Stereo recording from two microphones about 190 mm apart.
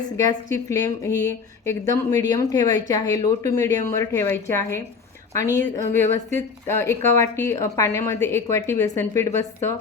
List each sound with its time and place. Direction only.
0.2 s speech: 15° left (ahead or behind)